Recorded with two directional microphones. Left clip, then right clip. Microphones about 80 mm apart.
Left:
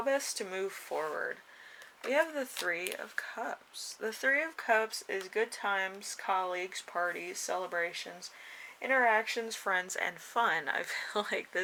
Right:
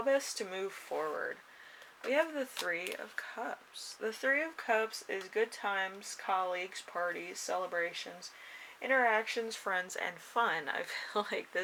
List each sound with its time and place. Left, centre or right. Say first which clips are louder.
0.0 s speech: even; left